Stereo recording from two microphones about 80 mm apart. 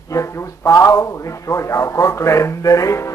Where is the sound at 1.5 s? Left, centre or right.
Left.